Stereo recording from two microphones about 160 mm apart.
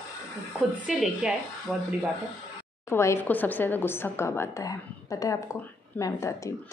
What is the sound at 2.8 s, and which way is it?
A woman's voice, 15° left (ahead or behind).